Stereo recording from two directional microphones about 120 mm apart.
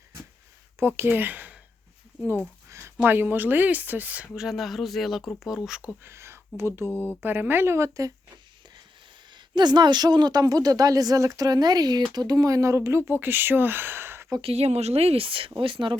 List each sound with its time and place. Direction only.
0.8 s speech: 20° right (ahead or behind)
2.6 s speech: 20° right (ahead or behind); by 5.9 s 5° right (ahead or behind)
6.0 s speech: 20° right (ahead or behind)
6.9 s speech: 15° left (ahead or behind)
7.2 s speech: 15° right (ahead or behind)
9.3 s speech: 35° right (ahead or behind)
14.4 s speech: 60° right (ahead or behind); by 16.0 s 45° right (ahead or behind)